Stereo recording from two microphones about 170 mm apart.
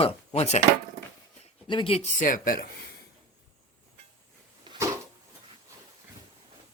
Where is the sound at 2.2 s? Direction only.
55° left (ahead or behind).